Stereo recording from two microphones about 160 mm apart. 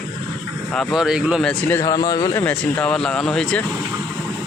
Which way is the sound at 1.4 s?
10° left (ahead or behind).